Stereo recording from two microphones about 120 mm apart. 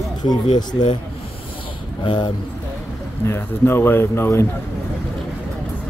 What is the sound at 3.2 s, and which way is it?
Speech, 20° left (ahead or behind).